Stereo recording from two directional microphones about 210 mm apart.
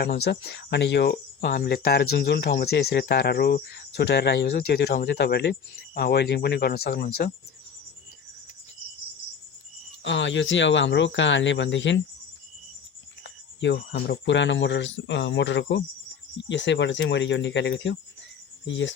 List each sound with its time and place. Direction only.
0.0 s speech: 50° left (ahead or behind)
10.0 s speech: 60° left (ahead or behind)
13.2 s speech: 55° left (ahead or behind)